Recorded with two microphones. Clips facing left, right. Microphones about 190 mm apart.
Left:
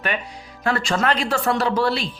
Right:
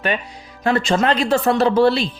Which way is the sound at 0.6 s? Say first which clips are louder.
Right 4 dB; 20° right (ahead or behind).